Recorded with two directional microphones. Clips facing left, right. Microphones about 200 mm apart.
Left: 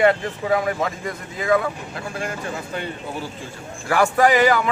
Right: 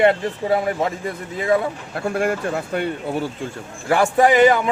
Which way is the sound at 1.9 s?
55° right (ahead or behind).